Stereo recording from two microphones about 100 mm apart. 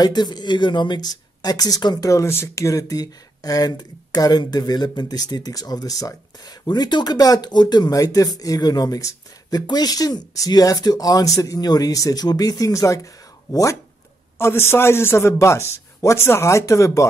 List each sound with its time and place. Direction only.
0.0 s speech: 45° left (ahead or behind)
2.0 s speech: 30° left (ahead or behind)